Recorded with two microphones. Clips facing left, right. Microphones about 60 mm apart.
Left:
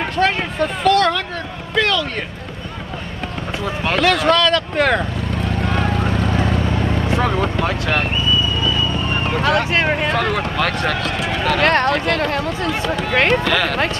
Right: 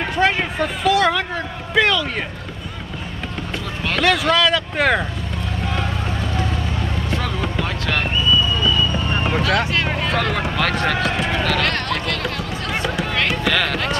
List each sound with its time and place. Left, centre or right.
0.1 s a sound: centre
0.6 s speech: centre
1.8 s a sound: centre
4.0 s speech: centre
7.1 s vehicle: left
7.4 s vehicle: centre
9.1 s clip-clop: centre
9.5 s speech: left
10.0 s speech: centre
11.6 s speech: left
13.5 s speech: centre